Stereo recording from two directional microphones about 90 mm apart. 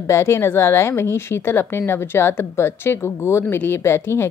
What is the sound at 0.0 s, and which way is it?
A woman's voice, 30° left (ahead or behind).